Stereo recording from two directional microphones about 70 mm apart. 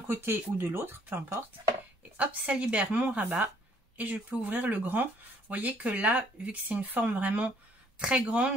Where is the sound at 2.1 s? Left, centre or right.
Centre.